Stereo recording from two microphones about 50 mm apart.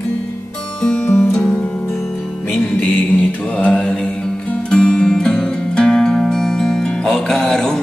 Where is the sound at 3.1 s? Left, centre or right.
Left; by 4.1 s centre.